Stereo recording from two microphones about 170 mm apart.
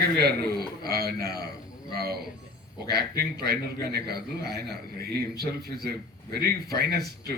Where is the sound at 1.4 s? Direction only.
65° right (ahead or behind).